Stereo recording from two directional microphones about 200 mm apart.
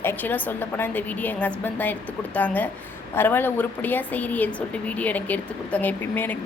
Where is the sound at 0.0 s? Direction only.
10° left (ahead or behind).